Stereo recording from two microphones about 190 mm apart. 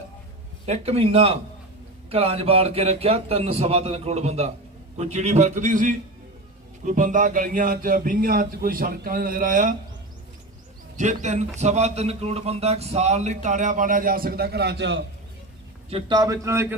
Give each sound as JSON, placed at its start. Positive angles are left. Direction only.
{"t": 0.6, "sound": "speech", "side_deg": -35}
{"t": 10.9, "sound": "speech", "side_deg": -40}
{"t": 15.9, "sound": "a man's voice", "side_deg": -25}